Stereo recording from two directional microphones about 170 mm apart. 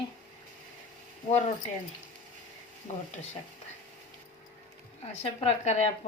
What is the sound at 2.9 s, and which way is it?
Speech, 45° left (ahead or behind).